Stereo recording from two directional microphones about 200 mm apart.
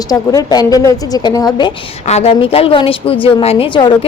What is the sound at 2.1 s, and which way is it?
Speech, 30° left (ahead or behind).